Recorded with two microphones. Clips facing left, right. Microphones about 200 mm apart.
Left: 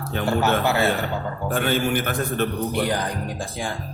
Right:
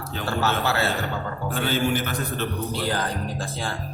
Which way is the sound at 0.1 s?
60° left (ahead or behind).